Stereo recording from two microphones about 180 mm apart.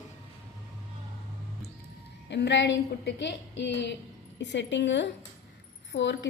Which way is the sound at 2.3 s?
75° left (ahead or behind).